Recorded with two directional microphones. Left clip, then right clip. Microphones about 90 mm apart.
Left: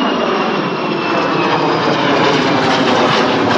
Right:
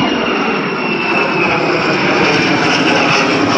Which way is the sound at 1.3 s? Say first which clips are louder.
Right 1 dB; 45° left (ahead or behind).